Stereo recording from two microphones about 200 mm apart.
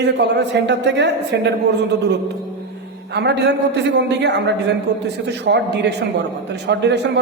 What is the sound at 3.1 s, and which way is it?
A woman's voice, 55° right (ahead or behind).